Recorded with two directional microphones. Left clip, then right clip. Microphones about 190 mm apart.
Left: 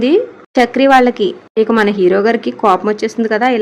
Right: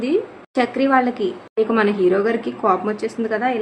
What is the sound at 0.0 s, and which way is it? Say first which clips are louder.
A woman's voice: left 8 dB; 45° left (ahead or behind).